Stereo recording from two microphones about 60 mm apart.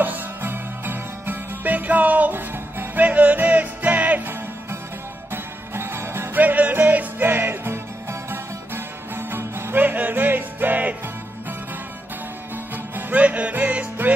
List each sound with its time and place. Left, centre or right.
0.0 s music: right
5.3 s music: right
6.4 s music: right
12.7 s music: right